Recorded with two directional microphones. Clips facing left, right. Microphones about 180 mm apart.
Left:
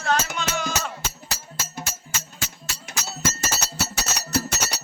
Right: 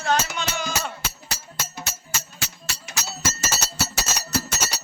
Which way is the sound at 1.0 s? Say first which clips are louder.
Left 1 dB; 45° left (ahead or behind).